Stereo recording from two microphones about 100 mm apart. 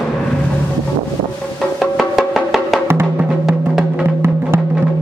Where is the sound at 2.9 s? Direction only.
25° right (ahead or behind).